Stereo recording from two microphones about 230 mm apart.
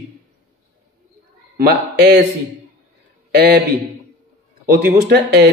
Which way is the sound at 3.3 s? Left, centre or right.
Right.